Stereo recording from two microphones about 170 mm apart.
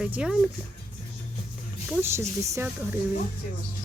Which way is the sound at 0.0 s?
5° right (ahead or behind).